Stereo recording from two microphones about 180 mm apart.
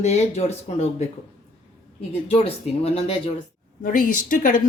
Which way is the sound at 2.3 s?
35° left (ahead or behind).